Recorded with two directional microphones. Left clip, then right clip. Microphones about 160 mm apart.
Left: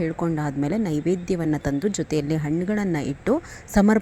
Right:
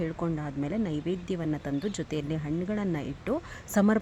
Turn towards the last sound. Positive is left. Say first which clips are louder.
# left 6 dB
turn(degrees=20)  # may be behind; listen again after turning